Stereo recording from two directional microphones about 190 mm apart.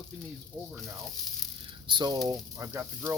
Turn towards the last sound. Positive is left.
turn(degrees=-15)  # may be behind; listen again after turning